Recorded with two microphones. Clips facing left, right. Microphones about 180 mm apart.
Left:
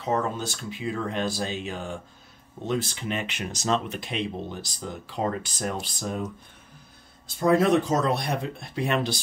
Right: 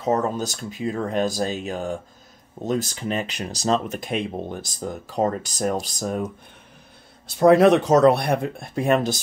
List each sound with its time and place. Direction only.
0.0 s speech: 40° right (ahead or behind)
7.2 s speech: 75° right (ahead or behind); by 9.2 s 45° right (ahead or behind)